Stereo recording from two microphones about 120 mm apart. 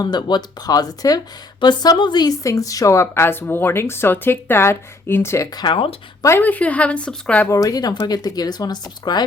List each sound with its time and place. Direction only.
0.0 s a woman's voice: 35° left (ahead or behind)
5.5 s speech: 45° left (ahead or behind)
6.2 s speech: 20° left (ahead or behind)
7.4 s speech: 30° left (ahead or behind)